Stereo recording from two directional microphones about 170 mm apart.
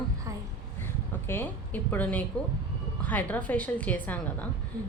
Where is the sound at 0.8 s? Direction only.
15° left (ahead or behind).